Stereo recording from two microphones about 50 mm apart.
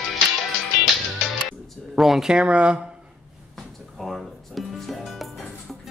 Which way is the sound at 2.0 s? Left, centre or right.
Centre.